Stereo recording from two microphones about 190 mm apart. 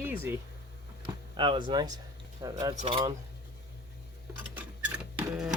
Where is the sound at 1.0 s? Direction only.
25° right (ahead or behind).